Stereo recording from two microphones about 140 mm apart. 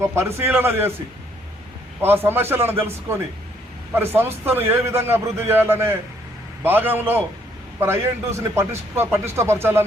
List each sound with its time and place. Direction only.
0.0 s a man's voice: 20° right (ahead or behind)
2.0 s a man's voice: 15° right (ahead or behind)